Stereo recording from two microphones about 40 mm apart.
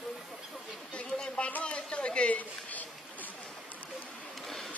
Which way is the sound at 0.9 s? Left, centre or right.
Left.